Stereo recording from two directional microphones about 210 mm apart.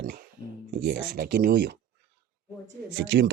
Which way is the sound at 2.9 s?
60° right (ahead or behind).